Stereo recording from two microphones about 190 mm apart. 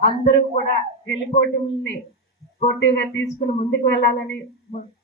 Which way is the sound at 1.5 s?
70° left (ahead or behind).